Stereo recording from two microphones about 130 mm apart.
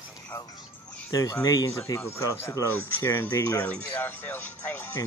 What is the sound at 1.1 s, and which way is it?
Speech, 25° left (ahead or behind).